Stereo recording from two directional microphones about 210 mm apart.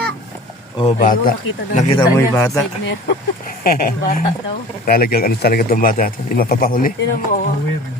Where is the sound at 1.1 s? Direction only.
40° left (ahead or behind).